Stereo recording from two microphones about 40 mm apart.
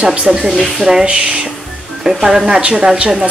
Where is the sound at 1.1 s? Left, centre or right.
Right.